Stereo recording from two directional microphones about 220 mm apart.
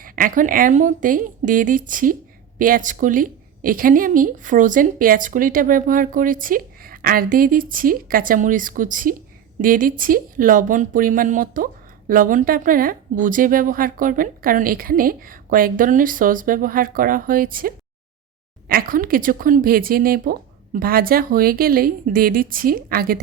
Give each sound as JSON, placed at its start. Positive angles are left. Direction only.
{"t": 0.0, "sound": "speech", "side_deg": -40}